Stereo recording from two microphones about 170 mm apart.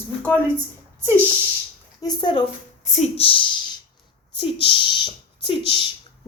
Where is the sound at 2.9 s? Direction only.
35° left (ahead or behind).